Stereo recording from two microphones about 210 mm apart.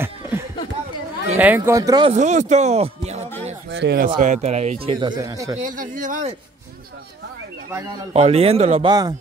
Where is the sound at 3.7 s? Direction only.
50° right (ahead or behind).